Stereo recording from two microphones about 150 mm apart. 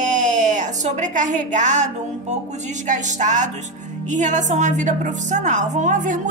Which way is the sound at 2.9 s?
55° right (ahead or behind).